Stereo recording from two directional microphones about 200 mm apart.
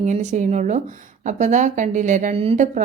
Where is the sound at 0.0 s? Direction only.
35° right (ahead or behind).